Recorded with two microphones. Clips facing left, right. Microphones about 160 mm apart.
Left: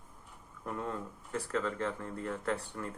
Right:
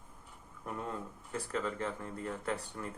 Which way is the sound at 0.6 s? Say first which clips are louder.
Left 2 dB; 20° right (ahead or behind).